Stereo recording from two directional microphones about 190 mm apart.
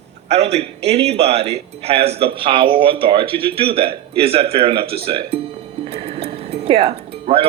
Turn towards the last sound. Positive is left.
turn(degrees=-30)  # may be behind; listen again after turning